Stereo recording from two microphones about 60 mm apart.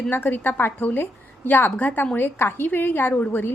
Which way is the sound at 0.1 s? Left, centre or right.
Left.